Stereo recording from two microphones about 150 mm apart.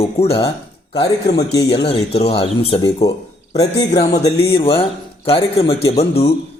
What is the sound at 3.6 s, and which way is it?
Speech, 25° left (ahead or behind).